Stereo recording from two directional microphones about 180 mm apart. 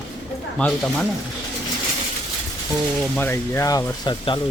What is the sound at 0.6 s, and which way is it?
Speech, 5° left (ahead or behind).